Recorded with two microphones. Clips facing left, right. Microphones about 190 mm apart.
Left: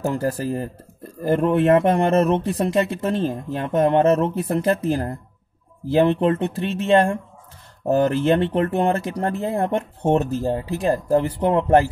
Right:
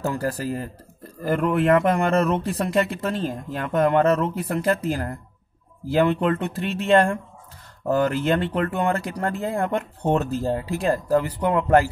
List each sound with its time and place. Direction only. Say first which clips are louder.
0.1 s speech: left 3 dB; 25° left (ahead or behind)
7.8 s speech: left 3 dB; 30° left (ahead or behind)